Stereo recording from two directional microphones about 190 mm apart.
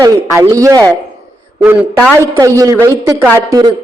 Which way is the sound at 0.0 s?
15° right (ahead or behind).